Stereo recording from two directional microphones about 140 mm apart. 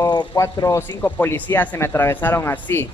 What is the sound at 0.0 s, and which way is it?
Speech, 25° left (ahead or behind).